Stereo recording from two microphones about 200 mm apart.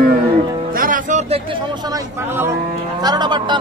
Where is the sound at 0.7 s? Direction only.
45° right (ahead or behind).